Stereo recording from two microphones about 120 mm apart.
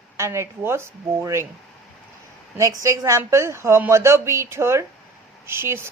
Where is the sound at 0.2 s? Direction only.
20° right (ahead or behind).